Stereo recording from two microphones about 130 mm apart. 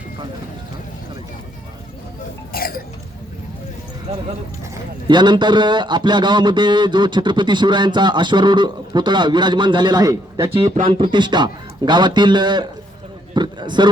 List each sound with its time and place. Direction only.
5.0 s a man's voice: 35° right (ahead or behind)
10.8 s a man's voice: 40° right (ahead or behind)
13.3 s a sound: 35° right (ahead or behind)